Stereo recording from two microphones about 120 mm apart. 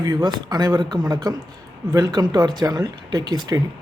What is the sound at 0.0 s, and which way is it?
Speech, 35° right (ahead or behind).